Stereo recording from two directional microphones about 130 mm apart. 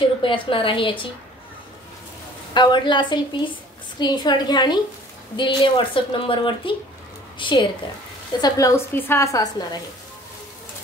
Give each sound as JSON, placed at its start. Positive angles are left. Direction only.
{"t": 0.2, "sound": "a woman's voice", "side_deg": 40}
{"t": 2.5, "sound": "a woman's voice", "side_deg": 35}
{"t": 8.4, "sound": "a woman's voice", "side_deg": 25}